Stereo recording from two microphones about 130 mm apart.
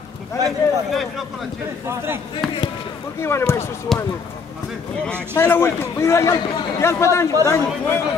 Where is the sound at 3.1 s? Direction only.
20° left (ahead or behind).